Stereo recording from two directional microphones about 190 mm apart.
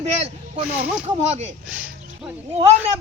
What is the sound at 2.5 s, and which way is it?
Speech, 30° right (ahead or behind).